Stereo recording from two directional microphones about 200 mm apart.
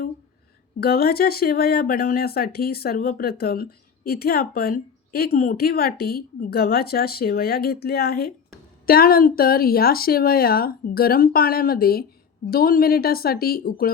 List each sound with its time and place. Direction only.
0.8 s speech: 50° left (ahead or behind)